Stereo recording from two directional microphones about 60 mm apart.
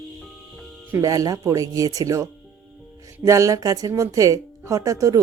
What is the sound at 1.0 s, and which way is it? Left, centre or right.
Speech, right.